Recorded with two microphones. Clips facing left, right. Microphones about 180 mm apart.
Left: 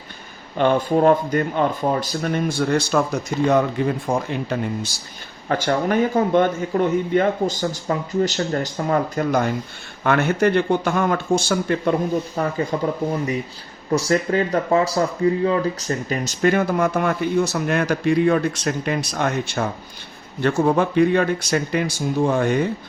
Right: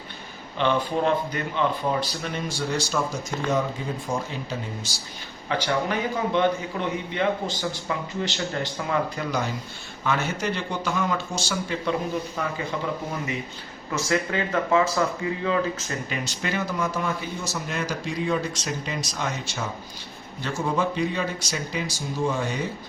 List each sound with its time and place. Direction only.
0.5 s speech: 45° left (ahead or behind)
5.5 s speech: 45° left (ahead or behind)
12.4 s speech: 40° left (ahead or behind)
13.9 s speech: 35° left (ahead or behind); by 22.7 s 60° left (ahead or behind)